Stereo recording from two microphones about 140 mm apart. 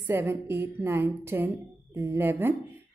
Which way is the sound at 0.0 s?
15° right (ahead or behind).